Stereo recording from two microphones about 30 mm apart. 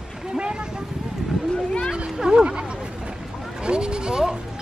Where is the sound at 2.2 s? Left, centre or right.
Right.